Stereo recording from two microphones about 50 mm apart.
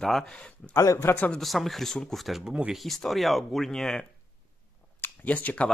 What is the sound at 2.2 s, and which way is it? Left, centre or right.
Speech, centre.